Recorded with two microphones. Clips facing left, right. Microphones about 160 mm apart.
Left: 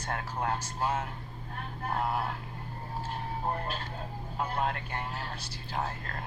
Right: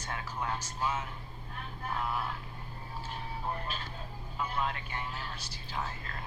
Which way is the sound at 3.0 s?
55° left (ahead or behind).